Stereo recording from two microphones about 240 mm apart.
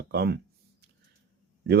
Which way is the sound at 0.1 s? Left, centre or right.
Right.